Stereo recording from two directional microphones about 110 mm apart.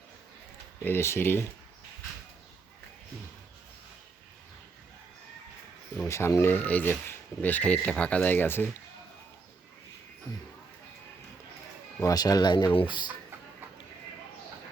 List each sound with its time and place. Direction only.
0.9 s speech: 20° left (ahead or behind)
6.1 s speech: 25° left (ahead or behind)
12.0 s speech: 35° left (ahead or behind)